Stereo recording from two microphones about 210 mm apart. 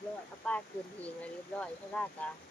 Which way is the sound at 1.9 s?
5° left (ahead or behind).